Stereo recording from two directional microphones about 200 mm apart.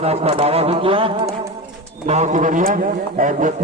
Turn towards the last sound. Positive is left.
turn(degrees=-40)  # may be behind; listen again after turning